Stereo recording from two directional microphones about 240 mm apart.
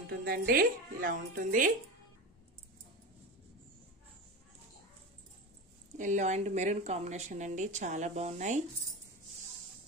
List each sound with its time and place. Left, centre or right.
0.2 s speech: right
5.9 s speech: right